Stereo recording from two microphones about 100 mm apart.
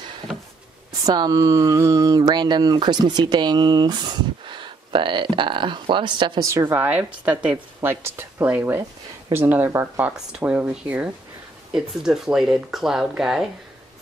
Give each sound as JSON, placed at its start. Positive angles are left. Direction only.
{"t": 1.0, "sound": "speech", "side_deg": -40}
{"t": 6.4, "sound": "a woman's voice", "side_deg": -35}
{"t": 6.7, "sound": "speech", "side_deg": -15}